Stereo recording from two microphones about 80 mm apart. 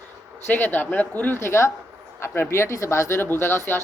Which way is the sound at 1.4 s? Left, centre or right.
Left.